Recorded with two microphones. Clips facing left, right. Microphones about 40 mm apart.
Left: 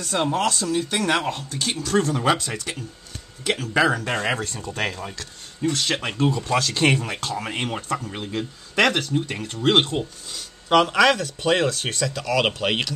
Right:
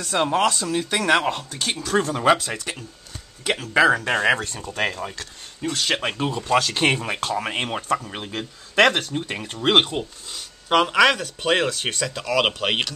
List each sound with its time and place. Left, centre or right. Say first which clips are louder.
0.4 s speech: right 2 dB; centre
0.7 s speech: right 2 dB; right
1.5 s speech: even; centre
3.9 s speech: right 4 dB; right
4.4 s speech: right 1 dB; centre